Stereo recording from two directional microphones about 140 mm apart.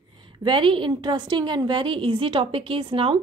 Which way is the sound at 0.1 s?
35° right (ahead or behind).